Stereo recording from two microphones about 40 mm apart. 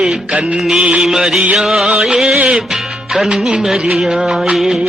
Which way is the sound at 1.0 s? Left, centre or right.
Centre.